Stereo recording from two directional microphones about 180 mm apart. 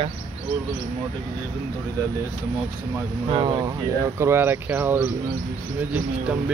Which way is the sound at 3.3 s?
25° right (ahead or behind).